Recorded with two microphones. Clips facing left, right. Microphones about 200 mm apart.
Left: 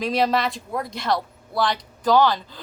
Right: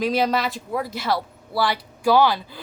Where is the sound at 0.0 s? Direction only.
Centre (ahead or behind).